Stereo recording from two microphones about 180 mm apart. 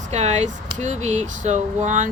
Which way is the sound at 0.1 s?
40° right (ahead or behind).